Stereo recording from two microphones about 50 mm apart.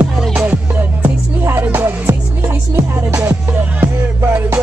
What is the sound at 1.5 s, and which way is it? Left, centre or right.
Music, right.